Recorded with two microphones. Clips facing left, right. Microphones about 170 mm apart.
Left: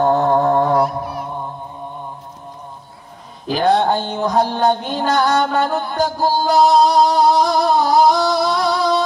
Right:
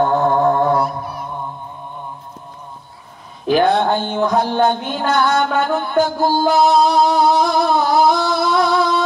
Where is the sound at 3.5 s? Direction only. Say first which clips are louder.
Right 1 dB; 35° left (ahead or behind).